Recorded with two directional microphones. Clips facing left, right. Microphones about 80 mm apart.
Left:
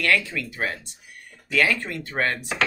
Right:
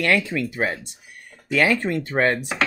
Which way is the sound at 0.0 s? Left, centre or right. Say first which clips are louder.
Right 3 dB; right.